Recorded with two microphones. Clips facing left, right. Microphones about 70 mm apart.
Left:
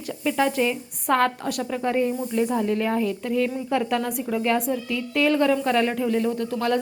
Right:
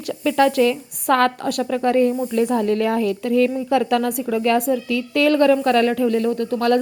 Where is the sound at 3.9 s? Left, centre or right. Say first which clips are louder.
Right 5 dB; right.